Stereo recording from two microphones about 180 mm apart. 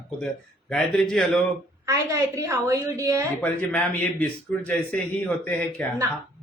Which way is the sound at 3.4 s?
10° left (ahead or behind).